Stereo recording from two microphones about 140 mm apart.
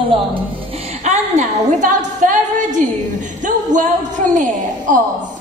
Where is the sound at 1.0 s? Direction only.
55° right (ahead or behind).